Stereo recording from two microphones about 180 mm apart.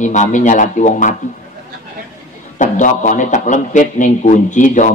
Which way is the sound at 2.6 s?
45° left (ahead or behind).